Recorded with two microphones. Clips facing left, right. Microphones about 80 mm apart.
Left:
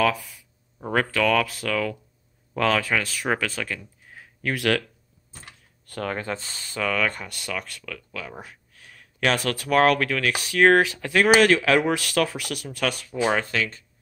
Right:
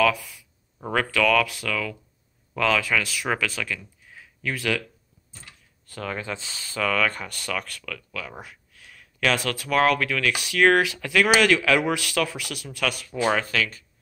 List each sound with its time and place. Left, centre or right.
0.9 s speech: left
5.9 s speech: left
6.8 s speech: centre
8.4 s speech: left
13.3 s speech: left